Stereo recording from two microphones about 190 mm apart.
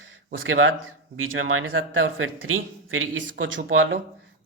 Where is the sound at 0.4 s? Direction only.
90° right.